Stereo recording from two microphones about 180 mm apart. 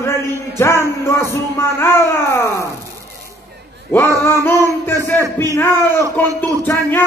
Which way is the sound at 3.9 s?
15° left (ahead or behind).